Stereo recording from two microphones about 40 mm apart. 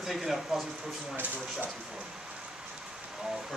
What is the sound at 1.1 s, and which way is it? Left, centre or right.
Speech, right.